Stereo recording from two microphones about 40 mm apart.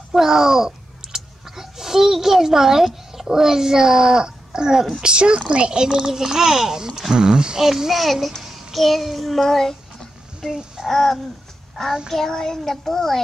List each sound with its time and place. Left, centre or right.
0.1 s a child's voice: centre
7.6 s a child's voice: centre
8.4 s child singing: centre
10.9 s a child's voice: centre
12.1 s a child's voice: centre